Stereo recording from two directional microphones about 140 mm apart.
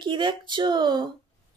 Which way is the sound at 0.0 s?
35° right (ahead or behind).